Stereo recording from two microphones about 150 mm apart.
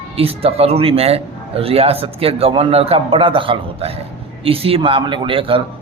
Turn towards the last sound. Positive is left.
turn(degrees=-35)  # may be behind; listen again after turning